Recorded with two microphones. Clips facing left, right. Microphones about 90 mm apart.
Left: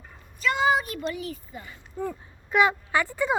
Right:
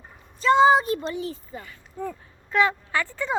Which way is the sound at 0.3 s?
30° right (ahead or behind).